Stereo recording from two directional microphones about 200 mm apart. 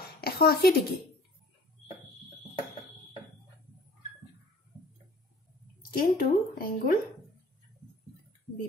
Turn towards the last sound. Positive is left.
turn(degrees=45)  # may be behind; listen again after turning